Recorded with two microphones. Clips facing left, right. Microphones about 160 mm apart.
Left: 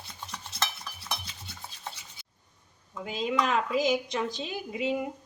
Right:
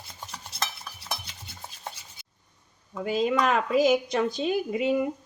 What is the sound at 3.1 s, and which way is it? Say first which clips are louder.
A woman's voice: right 4 dB; 55° right (ahead or behind).